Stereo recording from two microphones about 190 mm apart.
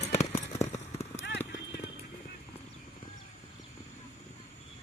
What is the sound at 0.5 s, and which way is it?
Vehicle, 35° left (ahead or behind).